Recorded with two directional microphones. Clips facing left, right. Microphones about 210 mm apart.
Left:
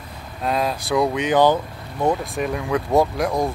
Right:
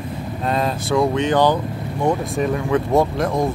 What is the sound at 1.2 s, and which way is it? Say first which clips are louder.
Speech: left 2 dB; 15° left (ahead or behind).